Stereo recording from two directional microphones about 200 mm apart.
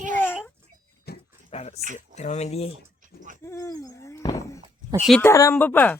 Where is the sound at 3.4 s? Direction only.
15° left (ahead or behind).